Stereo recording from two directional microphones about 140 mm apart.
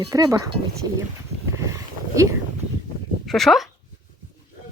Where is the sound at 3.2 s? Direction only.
Centre (ahead or behind).